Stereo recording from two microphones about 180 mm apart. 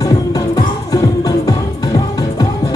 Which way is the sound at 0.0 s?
20° left (ahead or behind).